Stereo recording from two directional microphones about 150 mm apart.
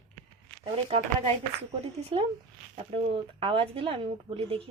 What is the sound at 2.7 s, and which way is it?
Speech, 40° right (ahead or behind).